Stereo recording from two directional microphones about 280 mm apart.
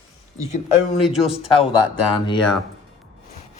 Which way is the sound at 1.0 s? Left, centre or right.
Centre.